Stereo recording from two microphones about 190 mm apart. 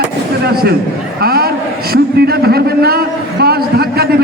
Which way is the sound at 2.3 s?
55° right (ahead or behind).